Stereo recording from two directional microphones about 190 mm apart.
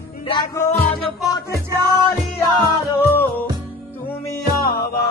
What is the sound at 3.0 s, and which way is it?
Music, 10° left (ahead or behind).